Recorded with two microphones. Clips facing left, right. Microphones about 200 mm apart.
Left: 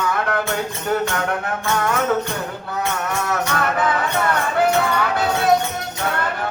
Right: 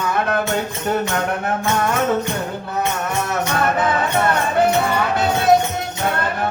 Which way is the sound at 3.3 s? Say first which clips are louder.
Right 3 dB; 20° right (ahead or behind).